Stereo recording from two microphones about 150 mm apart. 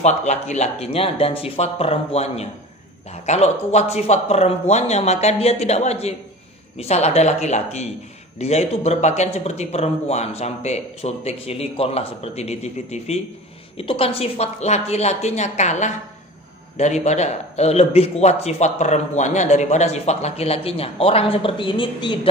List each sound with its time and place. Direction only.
0.0 s a man's voice: 50° left (ahead or behind); by 22.3 s 35° left (ahead or behind)